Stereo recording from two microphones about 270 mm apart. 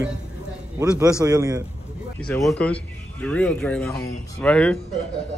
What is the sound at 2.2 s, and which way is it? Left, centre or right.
A man's voice, centre.